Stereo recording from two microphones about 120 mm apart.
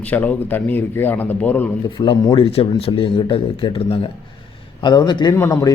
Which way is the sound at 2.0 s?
45° left (ahead or behind).